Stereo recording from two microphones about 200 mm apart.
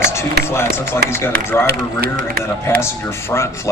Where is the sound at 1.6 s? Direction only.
50° right (ahead or behind).